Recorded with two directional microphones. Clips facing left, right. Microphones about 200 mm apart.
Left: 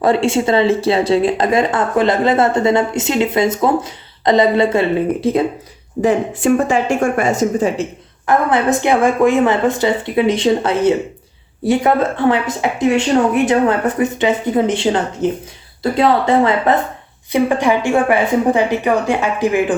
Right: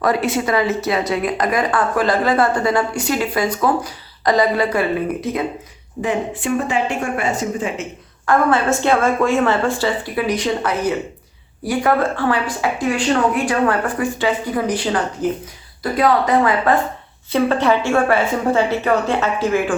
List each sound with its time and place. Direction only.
0.0 s speech: 25° left (ahead or behind)
6.0 s speech: 40° left (ahead or behind)
8.3 s speech: 20° left (ahead or behind)
17.3 s a woman's voice: 15° left (ahead or behind)